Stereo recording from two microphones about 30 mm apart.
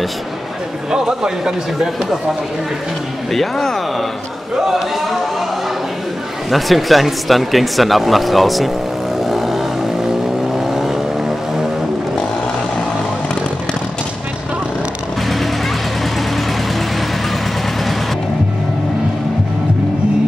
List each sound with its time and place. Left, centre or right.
0.9 s a man's voice: right
3.3 s speech: centre
6.5 s speech: centre
9.2 s vehicle: centre